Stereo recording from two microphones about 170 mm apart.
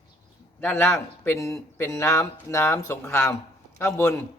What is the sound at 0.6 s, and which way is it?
Speech, 10° left (ahead or behind).